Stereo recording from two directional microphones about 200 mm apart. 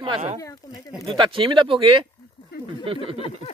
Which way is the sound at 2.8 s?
25° right (ahead or behind).